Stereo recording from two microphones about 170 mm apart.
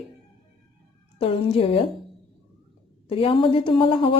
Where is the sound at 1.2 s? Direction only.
35° left (ahead or behind).